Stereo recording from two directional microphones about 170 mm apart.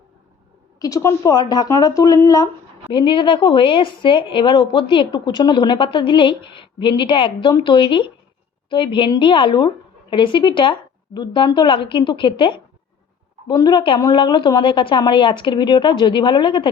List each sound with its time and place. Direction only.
0.8 s a woman's voice: 20° left (ahead or behind)